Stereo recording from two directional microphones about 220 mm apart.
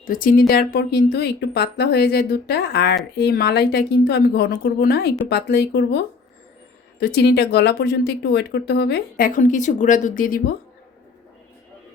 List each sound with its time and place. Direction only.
0.0 s speech: 40° left (ahead or behind)